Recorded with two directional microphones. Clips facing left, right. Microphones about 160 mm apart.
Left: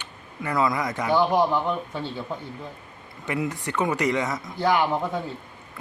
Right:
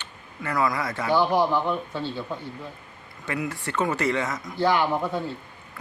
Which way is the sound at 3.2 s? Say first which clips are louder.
Left 2 dB; 20° left (ahead or behind).